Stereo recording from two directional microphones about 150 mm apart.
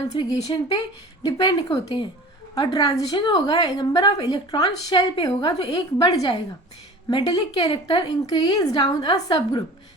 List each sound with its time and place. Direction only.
0.1 s a woman's voice: 25° left (ahead or behind)